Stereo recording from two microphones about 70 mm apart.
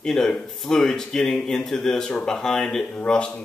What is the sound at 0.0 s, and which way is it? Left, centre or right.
Speech, centre.